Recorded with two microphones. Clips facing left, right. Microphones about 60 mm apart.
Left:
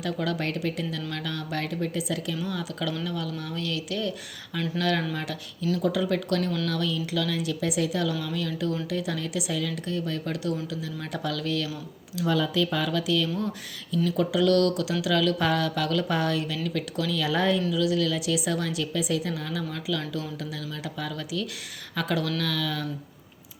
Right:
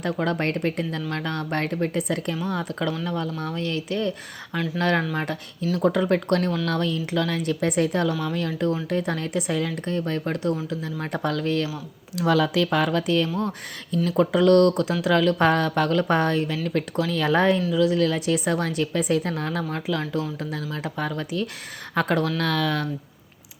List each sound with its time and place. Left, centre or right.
0.0 s speech: right
12.1 s speech: right
12.9 s speech: right
22.4 s speech: right